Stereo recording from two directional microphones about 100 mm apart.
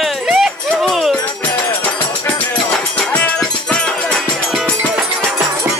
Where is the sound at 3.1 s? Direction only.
15° left (ahead or behind).